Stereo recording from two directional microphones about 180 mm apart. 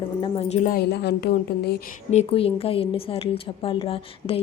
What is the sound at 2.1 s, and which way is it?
A woman's voice, 35° left (ahead or behind).